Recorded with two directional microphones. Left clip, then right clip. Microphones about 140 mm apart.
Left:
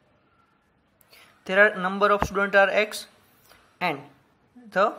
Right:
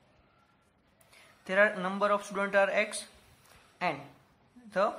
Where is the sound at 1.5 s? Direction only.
30° left (ahead or behind).